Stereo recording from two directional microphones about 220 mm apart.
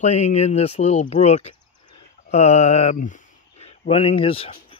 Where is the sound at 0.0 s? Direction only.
30° left (ahead or behind).